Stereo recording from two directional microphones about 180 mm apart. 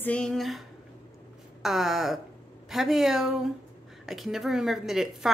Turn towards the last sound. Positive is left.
turn(degrees=0)  # may be behind; listen again after turning